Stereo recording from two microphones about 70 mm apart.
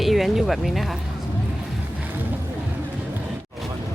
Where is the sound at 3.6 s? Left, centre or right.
Centre.